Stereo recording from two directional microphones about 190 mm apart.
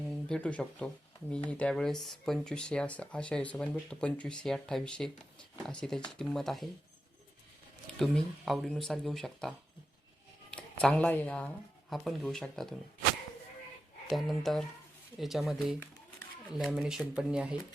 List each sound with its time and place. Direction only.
0.1 s speech: 5° left (ahead or behind)
7.9 s speech: centre (ahead or behind)
14.1 s speech: centre (ahead or behind)